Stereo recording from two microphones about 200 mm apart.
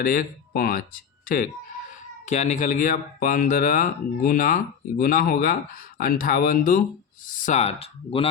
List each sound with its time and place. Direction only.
0.0 s speech: 45° left (ahead or behind)
2.2 s speech: 35° left (ahead or behind)